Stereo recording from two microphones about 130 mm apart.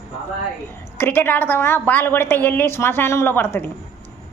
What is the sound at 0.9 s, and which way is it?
A woman's voice, 15° left (ahead or behind).